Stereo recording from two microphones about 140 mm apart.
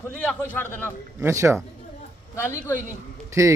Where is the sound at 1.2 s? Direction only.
20° right (ahead or behind).